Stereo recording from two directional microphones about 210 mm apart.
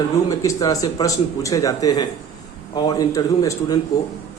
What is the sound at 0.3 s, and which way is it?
Speech, 15° left (ahead or behind).